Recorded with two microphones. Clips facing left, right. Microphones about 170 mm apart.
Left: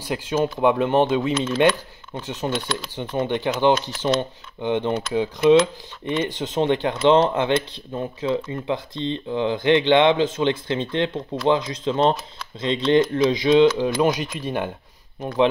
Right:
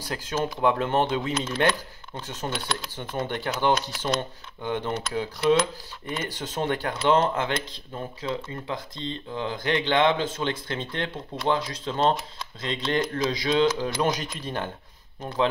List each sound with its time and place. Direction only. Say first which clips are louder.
0.3 s speech: left 5 dB; 15° left (ahead or behind)